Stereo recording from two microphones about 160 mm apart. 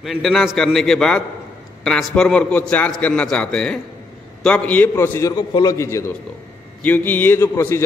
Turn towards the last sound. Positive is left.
turn(degrees=15)  # may be behind; listen again after turning